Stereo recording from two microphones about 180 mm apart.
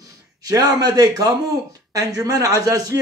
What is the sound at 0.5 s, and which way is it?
A man's voice, 20° right (ahead or behind).